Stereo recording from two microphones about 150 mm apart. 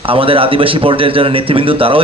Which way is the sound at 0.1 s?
35° right (ahead or behind).